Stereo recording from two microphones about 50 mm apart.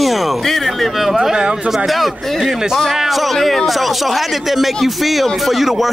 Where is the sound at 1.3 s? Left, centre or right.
Centre.